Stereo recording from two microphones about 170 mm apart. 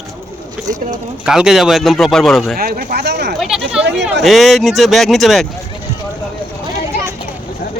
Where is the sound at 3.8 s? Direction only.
90° right.